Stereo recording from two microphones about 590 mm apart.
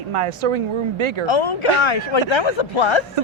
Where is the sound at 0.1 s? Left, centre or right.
Right.